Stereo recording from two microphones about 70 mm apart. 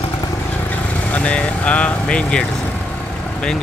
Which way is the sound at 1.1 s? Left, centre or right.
Centre.